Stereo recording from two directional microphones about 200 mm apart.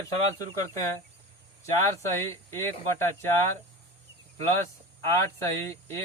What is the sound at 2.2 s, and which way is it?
Speech, 15° left (ahead or behind).